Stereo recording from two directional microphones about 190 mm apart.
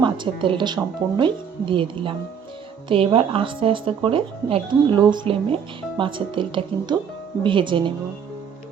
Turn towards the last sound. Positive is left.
turn(degrees=-25)  # may be behind; listen again after turning